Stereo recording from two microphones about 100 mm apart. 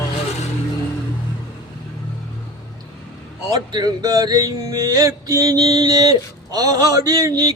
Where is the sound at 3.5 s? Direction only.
45° right (ahead or behind).